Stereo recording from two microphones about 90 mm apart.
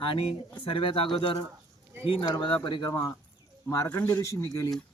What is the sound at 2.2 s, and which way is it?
Speech, 50° left (ahead or behind).